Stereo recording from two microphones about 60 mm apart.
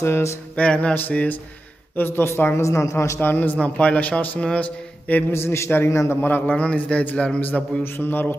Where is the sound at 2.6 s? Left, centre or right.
Left.